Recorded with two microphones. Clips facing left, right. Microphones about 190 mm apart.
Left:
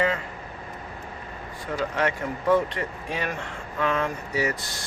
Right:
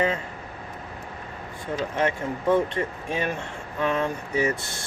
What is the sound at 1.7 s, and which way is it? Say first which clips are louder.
Speech: right 1 dB; 20° right (ahead or behind).